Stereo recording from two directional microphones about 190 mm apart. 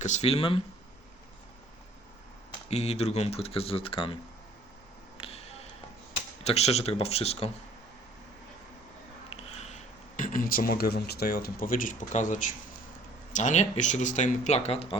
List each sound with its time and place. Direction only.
0.0 s speech: 35° left (ahead or behind)
2.6 s speech: 35° left (ahead or behind)
5.1 s a sound: 30° left (ahead or behind)
6.4 s speech: 35° left (ahead or behind)
9.3 s speech: 35° left (ahead or behind)